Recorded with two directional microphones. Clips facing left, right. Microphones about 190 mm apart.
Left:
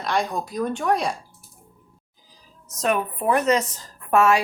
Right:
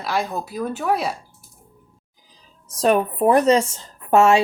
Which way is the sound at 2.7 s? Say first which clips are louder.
Right 5 dB; 35° right (ahead or behind).